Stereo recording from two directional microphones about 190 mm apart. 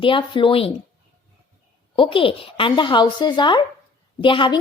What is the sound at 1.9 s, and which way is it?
A woman's voice, 25° left (ahead or behind).